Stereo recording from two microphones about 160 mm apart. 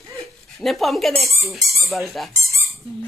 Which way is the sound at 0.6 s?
Centre (ahead or behind).